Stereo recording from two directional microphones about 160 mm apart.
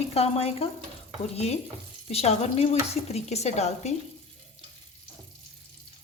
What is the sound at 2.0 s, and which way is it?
Speech, 40° left (ahead or behind).